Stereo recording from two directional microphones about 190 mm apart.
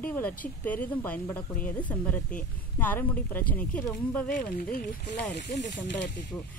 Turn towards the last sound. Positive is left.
turn(degrees=70)  # may be behind; listen again after turning